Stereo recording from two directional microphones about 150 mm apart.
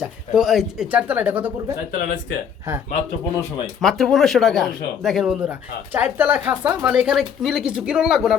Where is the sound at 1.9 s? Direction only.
65° left (ahead or behind).